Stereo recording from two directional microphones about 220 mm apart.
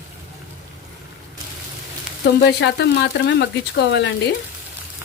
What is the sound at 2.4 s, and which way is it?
Speech, 50° left (ahead or behind).